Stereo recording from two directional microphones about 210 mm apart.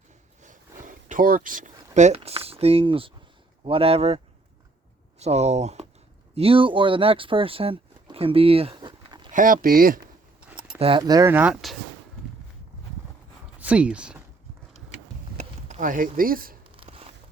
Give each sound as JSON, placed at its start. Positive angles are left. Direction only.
{"t": 0.4, "sound": "a sound", "side_deg": -40}
{"t": 3.6, "sound": "speech", "side_deg": -25}
{"t": 5.2, "sound": "speech", "side_deg": -30}
{"t": 9.3, "sound": "speech", "side_deg": -40}
{"t": 10.8, "sound": "speech", "side_deg": -25}
{"t": 13.6, "sound": "speech", "side_deg": -5}
{"t": 15.4, "sound": "speech", "side_deg": -35}
{"t": 16.7, "sound": "a sound", "side_deg": -25}